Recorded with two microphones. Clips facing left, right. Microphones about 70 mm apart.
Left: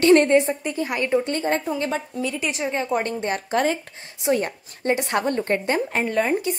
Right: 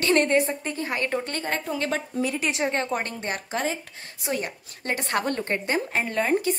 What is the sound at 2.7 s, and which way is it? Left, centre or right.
Speech, centre.